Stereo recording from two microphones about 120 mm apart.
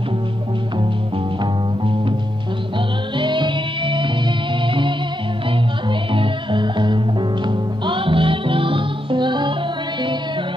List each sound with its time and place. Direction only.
3.2 s music: 40° right (ahead or behind)
6.1 s music: 45° right (ahead or behind)